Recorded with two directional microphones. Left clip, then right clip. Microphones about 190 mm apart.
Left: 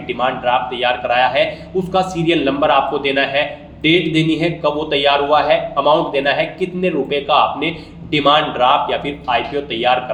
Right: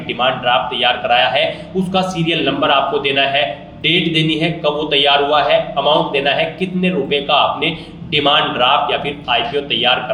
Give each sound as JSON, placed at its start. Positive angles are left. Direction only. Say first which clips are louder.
{"t": 0.2, "sound": "a man's voice", "louder": "right 2 dB", "side_deg": 45}